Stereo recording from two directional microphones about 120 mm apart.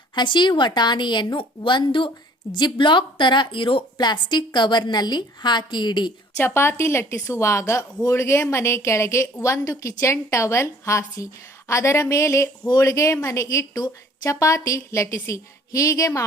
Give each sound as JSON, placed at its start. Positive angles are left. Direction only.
{"t": 0.1, "sound": "a woman's voice", "side_deg": 40}
{"t": 6.3, "sound": "a woman's voice", "side_deg": 20}